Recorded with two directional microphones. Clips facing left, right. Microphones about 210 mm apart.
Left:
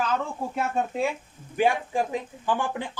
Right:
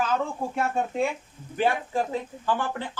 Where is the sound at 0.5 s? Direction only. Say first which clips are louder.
Left 1 dB; centre (ahead or behind).